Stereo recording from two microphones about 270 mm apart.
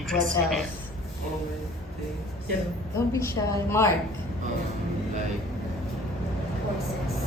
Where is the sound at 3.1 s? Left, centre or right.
Centre.